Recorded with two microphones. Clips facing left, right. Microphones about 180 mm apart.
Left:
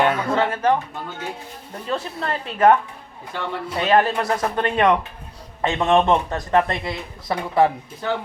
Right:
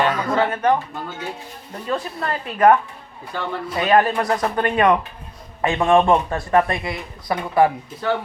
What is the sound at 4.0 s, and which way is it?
Speech, centre (ahead or behind).